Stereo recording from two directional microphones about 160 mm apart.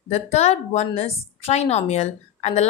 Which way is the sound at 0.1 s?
45° left (ahead or behind).